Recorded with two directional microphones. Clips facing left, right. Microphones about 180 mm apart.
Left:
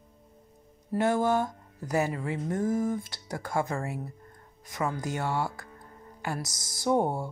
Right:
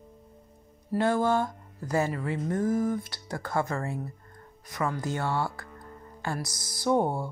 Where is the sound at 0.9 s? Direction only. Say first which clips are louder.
Even; 20° left (ahead or behind).